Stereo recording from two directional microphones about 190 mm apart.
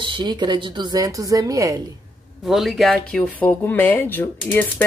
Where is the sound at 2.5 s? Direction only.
Centre (ahead or behind).